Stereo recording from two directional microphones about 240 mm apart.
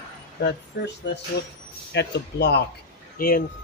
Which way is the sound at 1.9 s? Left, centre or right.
Left.